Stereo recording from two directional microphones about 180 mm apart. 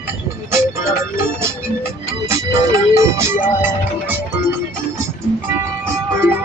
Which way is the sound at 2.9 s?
15° right (ahead or behind).